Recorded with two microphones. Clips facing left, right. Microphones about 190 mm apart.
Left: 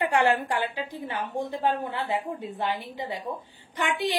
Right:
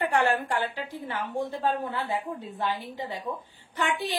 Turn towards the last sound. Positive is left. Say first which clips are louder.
# even
turn(degrees=15)  # may be behind; listen again after turning